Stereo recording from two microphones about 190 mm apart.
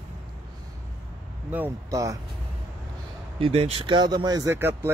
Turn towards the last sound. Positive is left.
turn(degrees=-15)  # may be behind; listen again after turning